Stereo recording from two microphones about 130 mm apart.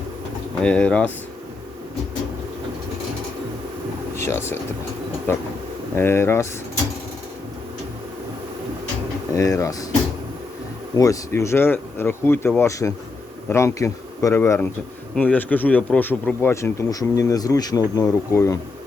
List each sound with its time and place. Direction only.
0.6 s speech: 10° left (ahead or behind)
4.1 s speech: 20° left (ahead or behind)
5.9 s speech: 15° left (ahead or behind)
9.3 s speech: 25° left (ahead or behind)
10.9 s speech: 25° left (ahead or behind)